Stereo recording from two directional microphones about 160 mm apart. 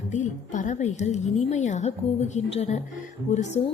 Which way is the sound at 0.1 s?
50° left (ahead or behind).